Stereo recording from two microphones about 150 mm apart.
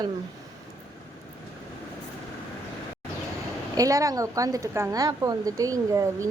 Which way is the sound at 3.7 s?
25° right (ahead or behind).